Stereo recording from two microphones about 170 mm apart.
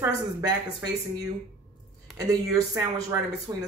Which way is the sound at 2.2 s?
20° right (ahead or behind).